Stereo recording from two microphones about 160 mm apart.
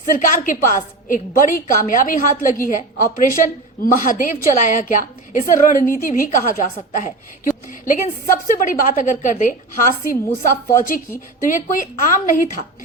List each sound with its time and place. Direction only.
0.1 s a woman's voice: 55° left (ahead or behind)
8.4 s a woman's voice: 60° left (ahead or behind)